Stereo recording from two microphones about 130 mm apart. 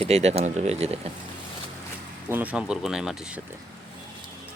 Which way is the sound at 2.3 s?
10° right (ahead or behind).